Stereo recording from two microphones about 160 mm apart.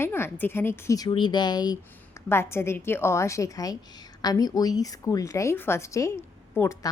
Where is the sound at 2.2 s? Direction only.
15° left (ahead or behind).